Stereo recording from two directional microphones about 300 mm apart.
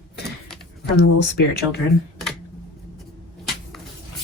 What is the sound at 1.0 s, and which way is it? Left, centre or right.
Speech, left.